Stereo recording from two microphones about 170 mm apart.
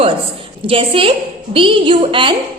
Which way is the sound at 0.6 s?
30° right (ahead or behind).